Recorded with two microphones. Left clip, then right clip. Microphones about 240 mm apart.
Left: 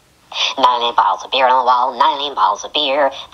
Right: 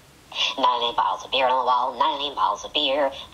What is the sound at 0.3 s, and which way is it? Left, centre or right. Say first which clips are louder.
Speech: left 7 dB; left.